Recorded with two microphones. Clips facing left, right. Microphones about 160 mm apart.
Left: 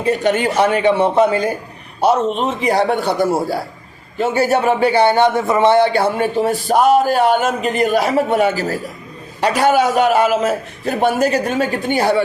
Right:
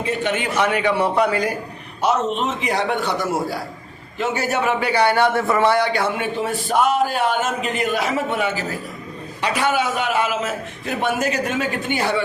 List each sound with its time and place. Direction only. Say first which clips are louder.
0.0 s a man's voice: left 6 dB; 40° left (ahead or behind)
2.0 s a man's voice: left 5 dB; 35° left (ahead or behind)